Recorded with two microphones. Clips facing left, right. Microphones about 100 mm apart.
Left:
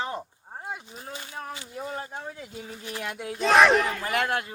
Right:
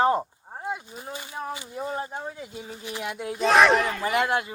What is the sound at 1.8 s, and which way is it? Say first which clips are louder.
Speech: right 4 dB; 25° right (ahead or behind).